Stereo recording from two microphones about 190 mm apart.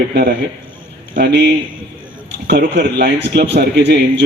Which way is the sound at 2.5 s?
60° right (ahead or behind).